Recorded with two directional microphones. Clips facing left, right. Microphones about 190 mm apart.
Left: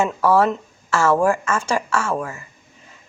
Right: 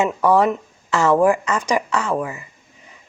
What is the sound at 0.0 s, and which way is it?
Speech, 15° right (ahead or behind).